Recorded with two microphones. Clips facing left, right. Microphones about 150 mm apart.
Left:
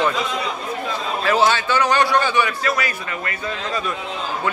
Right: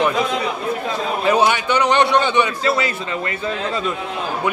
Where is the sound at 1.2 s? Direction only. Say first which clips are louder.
Right 1 dB; 15° right (ahead or behind).